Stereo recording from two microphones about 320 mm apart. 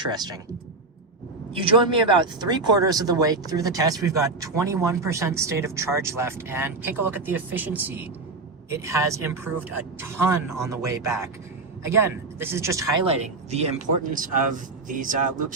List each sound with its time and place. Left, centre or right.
0.1 s speech: centre
1.5 s speech: centre
13.2 s speech: centre